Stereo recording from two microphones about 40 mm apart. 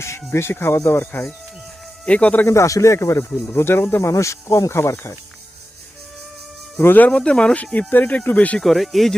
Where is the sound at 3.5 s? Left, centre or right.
Left.